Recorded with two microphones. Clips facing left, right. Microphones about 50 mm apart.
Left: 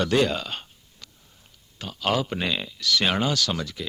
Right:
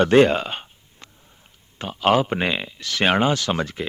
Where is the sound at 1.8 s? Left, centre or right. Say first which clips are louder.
Right 7 dB; right.